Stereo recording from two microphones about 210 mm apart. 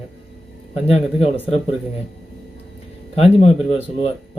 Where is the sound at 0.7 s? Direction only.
30° left (ahead or behind).